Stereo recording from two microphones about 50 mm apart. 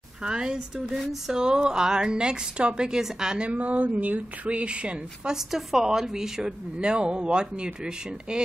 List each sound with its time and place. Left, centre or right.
0.2 s speech: centre
3.4 s speech: right
5.5 s speech: centre